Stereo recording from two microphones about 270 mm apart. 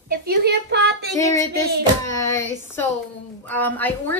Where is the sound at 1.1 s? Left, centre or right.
Centre.